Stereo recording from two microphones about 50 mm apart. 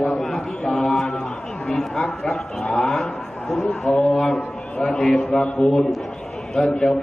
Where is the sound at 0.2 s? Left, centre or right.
Centre.